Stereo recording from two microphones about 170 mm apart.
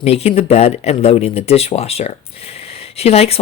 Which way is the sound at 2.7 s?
35° left (ahead or behind).